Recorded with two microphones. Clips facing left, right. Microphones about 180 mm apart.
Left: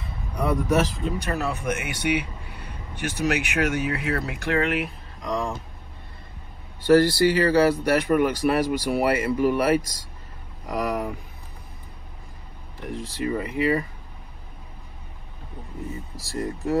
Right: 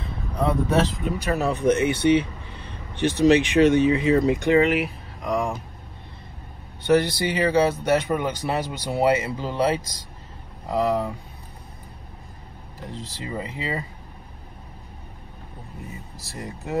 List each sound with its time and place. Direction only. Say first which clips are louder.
0.4 s speech: right 1 dB; 20° right (ahead or behind)
1.0 s speech: right 3 dB; centre (ahead or behind)
1.7 s a sound: right 9 dB; 10° left (ahead or behind)
3.8 s speech: right 8 dB; 5° left (ahead or behind)
6.8 s speech: left 3 dB; 20° right (ahead or behind)
12.9 s speech: left 5 dB; 20° right (ahead or behind)
16.3 s speech: left 7 dB; 20° right (ahead or behind)